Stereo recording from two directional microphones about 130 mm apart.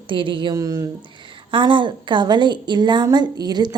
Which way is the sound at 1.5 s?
40° right (ahead or behind).